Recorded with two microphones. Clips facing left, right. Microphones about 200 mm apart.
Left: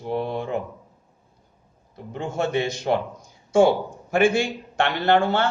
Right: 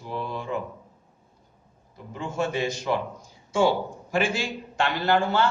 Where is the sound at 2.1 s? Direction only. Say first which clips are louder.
Left 3 dB; 60° left (ahead or behind).